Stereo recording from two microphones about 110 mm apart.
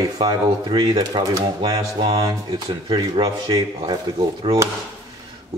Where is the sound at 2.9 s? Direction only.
50° right (ahead or behind).